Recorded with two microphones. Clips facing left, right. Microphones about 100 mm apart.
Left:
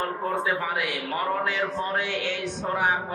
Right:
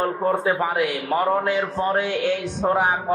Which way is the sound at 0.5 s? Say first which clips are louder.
Right 6 dB; 40° right (ahead or behind).